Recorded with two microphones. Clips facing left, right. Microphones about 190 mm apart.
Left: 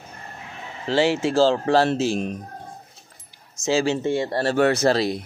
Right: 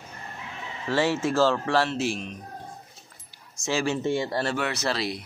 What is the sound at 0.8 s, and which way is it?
Speech, 30° left (ahead or behind).